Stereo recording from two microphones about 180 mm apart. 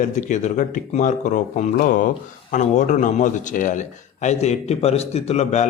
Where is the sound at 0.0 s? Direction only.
40° left (ahead or behind).